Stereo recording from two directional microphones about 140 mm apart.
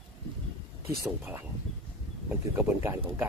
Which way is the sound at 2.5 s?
15° right (ahead or behind).